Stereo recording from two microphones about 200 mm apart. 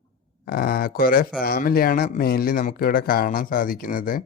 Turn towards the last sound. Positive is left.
turn(degrees=45)  # may be behind; listen again after turning